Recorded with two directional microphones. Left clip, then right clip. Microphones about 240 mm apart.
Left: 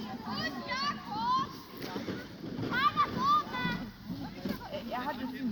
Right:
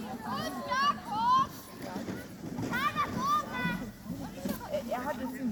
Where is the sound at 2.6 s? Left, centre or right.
Right.